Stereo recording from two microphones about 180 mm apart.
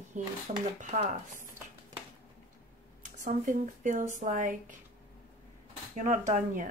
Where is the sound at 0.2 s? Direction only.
45° right (ahead or behind).